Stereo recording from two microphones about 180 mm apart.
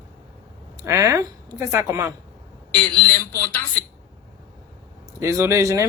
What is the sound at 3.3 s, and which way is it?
Speech, 20° left (ahead or behind).